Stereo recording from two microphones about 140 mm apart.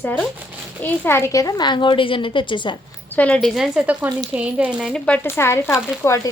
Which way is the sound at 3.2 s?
10° left (ahead or behind).